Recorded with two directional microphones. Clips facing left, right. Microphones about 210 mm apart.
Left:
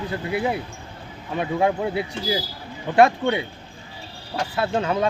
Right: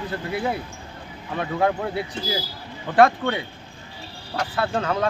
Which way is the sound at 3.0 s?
20° left (ahead or behind).